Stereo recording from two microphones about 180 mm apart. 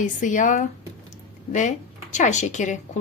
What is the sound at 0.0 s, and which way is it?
Speech, 45° left (ahead or behind).